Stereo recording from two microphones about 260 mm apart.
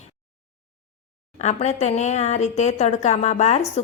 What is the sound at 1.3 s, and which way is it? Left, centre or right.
A woman's voice, left.